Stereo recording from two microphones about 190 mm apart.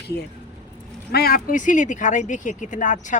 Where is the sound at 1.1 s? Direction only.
55° left (ahead or behind).